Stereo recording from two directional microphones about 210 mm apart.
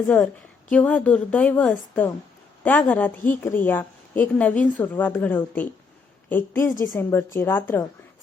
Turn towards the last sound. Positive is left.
turn(degrees=10)  # may be behind; listen again after turning